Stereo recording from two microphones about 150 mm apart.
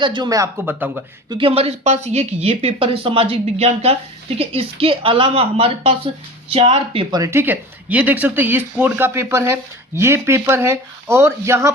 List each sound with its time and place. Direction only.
0.0 s speech: 30° right (ahead or behind); by 1.0 s 10° right (ahead or behind)
1.3 s speech: 35° right (ahead or behind)
7.1 s speech: 20° right (ahead or behind)